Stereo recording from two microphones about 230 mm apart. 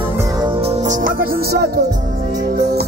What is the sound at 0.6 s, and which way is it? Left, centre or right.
Music, right.